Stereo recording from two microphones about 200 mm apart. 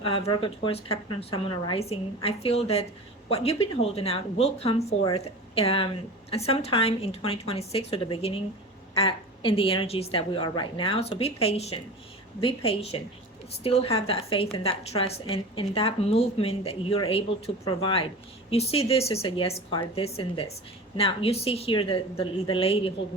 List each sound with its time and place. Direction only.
0.0 s a woman's voice: 25° left (ahead or behind)